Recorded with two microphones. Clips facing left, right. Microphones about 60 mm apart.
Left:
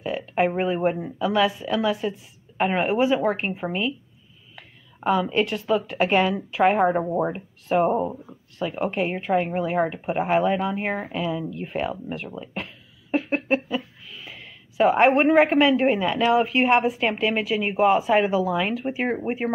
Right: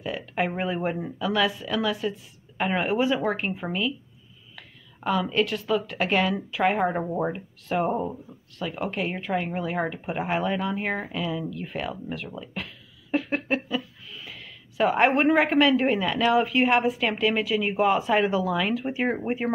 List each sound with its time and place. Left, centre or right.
0.0 s a sound: centre
1.1 s a woman's voice: centre
3.3 s speech: left
4.6 s a sound: left
5.3 s a woman's voice: left
7.3 s a woman's voice: centre
12.4 s a sound: left
14.0 s a woman's voice: centre
17.6 s a woman's voice: centre
17.8 s a woman's voice: centre